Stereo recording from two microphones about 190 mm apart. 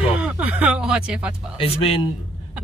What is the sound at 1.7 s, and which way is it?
Speech, 30° left (ahead or behind).